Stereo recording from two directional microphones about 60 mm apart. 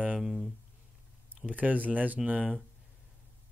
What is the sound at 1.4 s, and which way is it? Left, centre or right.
Speech, right.